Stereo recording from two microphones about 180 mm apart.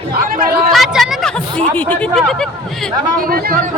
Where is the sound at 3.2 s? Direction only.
55° right (ahead or behind).